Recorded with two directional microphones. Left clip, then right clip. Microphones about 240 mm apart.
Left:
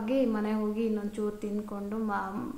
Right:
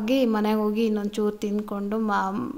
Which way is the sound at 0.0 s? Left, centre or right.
Right.